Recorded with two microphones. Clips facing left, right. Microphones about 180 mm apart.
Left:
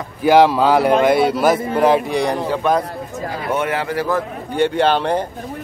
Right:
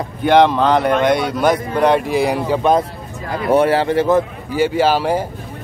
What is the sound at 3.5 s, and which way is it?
Speech, 35° right (ahead or behind).